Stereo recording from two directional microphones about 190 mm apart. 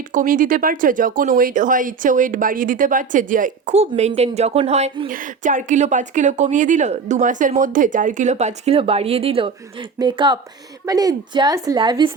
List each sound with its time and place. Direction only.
0.1 s speech: 45° right (ahead or behind); by 12.1 s 25° right (ahead or behind)